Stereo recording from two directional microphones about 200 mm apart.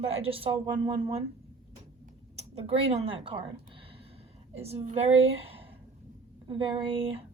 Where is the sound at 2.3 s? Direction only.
30° right (ahead or behind).